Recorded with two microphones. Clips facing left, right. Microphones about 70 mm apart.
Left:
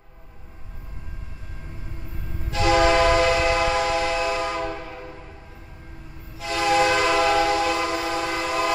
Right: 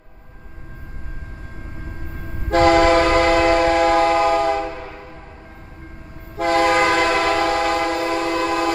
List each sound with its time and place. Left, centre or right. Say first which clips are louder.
2.5 s train: right 5 dB; right
6.3 s train: right 5 dB; right